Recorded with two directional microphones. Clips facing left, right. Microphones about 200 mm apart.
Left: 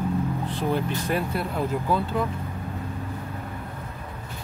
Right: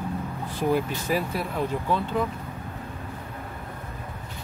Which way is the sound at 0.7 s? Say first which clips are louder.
Right 1 dB; centre (ahead or behind).